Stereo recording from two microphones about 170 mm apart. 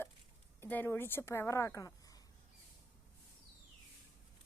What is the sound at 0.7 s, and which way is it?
A woman's voice, 10° left (ahead or behind).